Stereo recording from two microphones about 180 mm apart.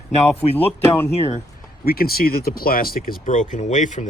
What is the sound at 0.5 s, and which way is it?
Speech, 10° left (ahead or behind).